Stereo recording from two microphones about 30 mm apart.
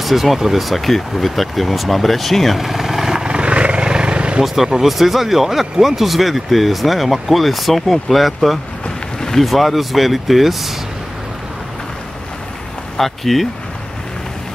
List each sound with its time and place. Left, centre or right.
0.0 s speech: centre
2.6 s vehicle: centre
3.3 s vehicle: right
4.8 s speech: centre
12.9 s speech: centre